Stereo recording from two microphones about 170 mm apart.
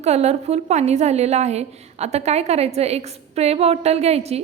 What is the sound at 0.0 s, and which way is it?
A woman's voice, 40° right (ahead or behind).